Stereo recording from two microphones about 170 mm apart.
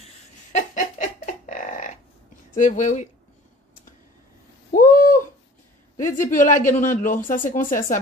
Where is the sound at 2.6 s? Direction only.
45° left (ahead or behind).